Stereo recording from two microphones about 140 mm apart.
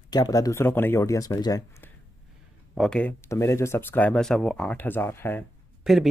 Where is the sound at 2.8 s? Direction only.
5° left (ahead or behind).